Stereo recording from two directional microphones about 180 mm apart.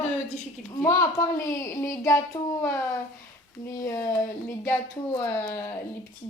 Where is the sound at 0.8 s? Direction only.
15° left (ahead or behind).